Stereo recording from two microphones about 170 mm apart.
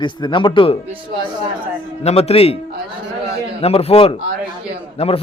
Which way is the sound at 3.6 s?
35° left (ahead or behind).